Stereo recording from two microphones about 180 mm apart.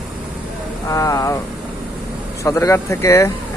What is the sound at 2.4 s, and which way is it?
Speech, 15° left (ahead or behind).